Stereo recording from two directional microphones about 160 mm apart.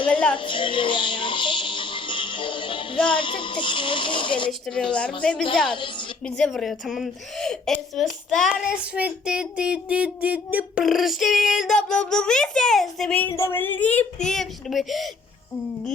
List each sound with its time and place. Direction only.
0.1 s a sound: 5° left (ahead or behind)
0.3 s speech: 30° left (ahead or behind)
4.6 s a woman's voice: 5° left (ahead or behind)
5.7 s a woman's voice: 30° left (ahead or behind)
6.2 s a woman's voice: 5° left (ahead or behind)